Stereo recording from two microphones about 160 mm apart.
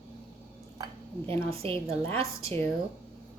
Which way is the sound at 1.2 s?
15° left (ahead or behind).